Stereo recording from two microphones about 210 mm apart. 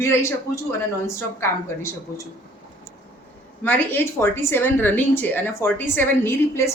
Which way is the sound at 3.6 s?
10° left (ahead or behind).